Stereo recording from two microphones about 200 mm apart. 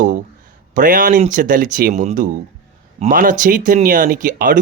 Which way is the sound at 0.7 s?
40° right (ahead or behind).